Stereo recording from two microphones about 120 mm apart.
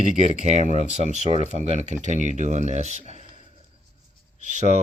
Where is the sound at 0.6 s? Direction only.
70° right (ahead or behind).